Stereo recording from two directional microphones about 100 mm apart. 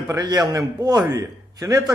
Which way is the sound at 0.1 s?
40° right (ahead or behind).